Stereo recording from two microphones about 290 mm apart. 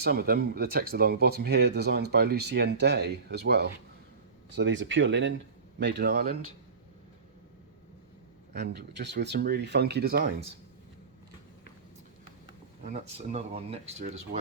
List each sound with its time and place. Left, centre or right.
0.0 s speech: right
8.5 s speech: right
12.5 s speech: right